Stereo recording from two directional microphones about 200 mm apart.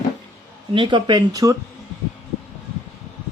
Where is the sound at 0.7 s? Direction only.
25° right (ahead or behind).